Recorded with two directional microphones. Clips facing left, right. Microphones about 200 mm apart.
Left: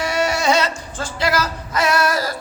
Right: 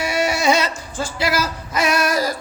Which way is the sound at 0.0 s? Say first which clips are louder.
Even; 10° right (ahead or behind).